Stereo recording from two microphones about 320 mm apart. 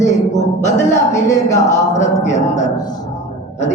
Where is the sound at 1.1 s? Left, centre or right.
Centre.